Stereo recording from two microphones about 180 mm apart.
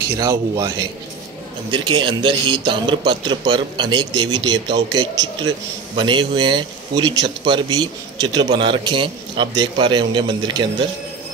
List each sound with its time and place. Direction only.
0.1 s a man's voice: 20° right (ahead or behind)